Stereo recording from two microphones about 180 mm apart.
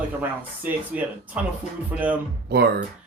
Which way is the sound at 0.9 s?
5° right (ahead or behind).